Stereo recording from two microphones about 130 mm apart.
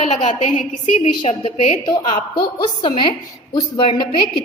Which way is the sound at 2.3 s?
35° left (ahead or behind).